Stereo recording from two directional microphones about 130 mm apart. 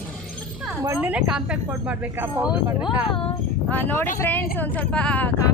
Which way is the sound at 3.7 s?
15° left (ahead or behind).